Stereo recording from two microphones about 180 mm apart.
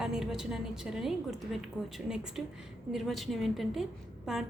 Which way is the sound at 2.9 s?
Centre (ahead or behind).